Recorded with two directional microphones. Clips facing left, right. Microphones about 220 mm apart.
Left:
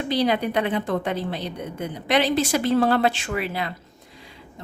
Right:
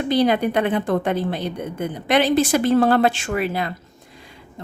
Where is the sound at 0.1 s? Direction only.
50° right (ahead or behind).